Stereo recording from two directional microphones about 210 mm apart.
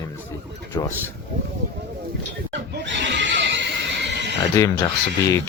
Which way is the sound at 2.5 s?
60° right (ahead or behind).